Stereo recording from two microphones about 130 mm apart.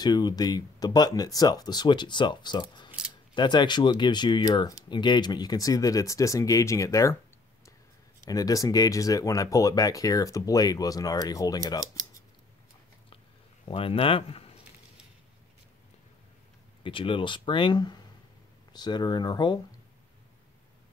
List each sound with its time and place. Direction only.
0.0 s speech: 30° left (ahead or behind)
8.3 s speech: 25° left (ahead or behind)
13.7 s speech: 45° left (ahead or behind)
16.8 s speech: 40° left (ahead or behind)